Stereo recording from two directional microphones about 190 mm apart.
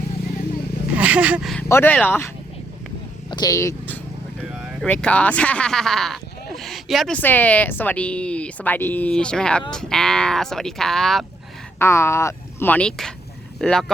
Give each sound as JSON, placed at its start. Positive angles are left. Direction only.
{"t": 0.9, "sound": "speech", "side_deg": -5}
{"t": 1.6, "sound": "speech", "side_deg": 10}
{"t": 3.2, "sound": "speech", "side_deg": 20}
{"t": 4.4, "sound": "vehicle", "side_deg": -5}
{"t": 4.9, "sound": "speech", "side_deg": 5}
{"t": 11.8, "sound": "speech", "side_deg": 15}